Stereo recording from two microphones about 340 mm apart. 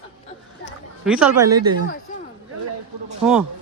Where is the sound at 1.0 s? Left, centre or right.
Centre.